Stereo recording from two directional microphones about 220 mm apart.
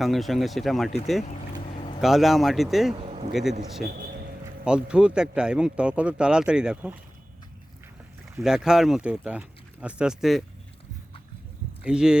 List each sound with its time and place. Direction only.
0.0 s speech: centre (ahead or behind)
1.2 s vehicle: 30° left (ahead or behind)
2.0 s speech: centre (ahead or behind)
2.9 s a sound: 25° right (ahead or behind)
4.6 s speech: 5° right (ahead or behind)
8.4 s speech: centre (ahead or behind)
11.9 s speech: 5° right (ahead or behind)